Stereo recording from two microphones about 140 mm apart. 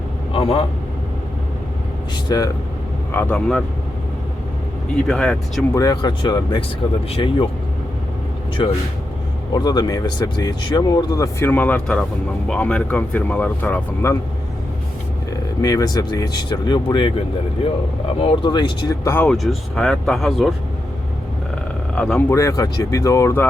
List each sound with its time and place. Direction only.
0.3 s a man's voice: 40° left (ahead or behind)
2.3 s speech: 25° left (ahead or behind)
3.1 s speech: 10° left (ahead or behind)
5.0 s speech: 5° left (ahead or behind)
5.7 s speech: 25° left (ahead or behind)
8.6 s speech: 35° left (ahead or behind); by 14.2 s 15° left (ahead or behind)
15.3 s speech: 25° left (ahead or behind)
18.2 s speech: 35° left (ahead or behind)
19.0 s speech: 15° left (ahead or behind)
19.3 s speech: centre (ahead or behind)
21.9 s speech: 5° left (ahead or behind)
22.4 s speech: 20° left (ahead or behind)